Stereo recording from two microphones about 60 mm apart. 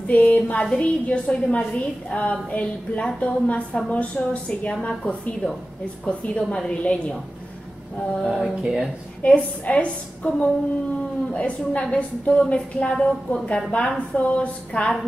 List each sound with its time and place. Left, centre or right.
0.0 s a woman's voice: left
8.1 s speech: centre
9.2 s a woman's voice: left
13.7 s a woman's voice: left